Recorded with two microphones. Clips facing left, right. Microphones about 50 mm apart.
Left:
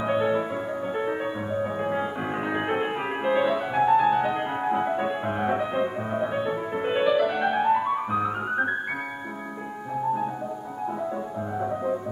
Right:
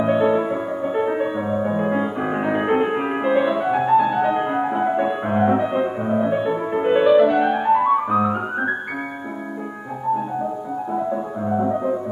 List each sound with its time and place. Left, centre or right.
0.0 s music: centre
7.8 s music: centre
11.6 s music: centre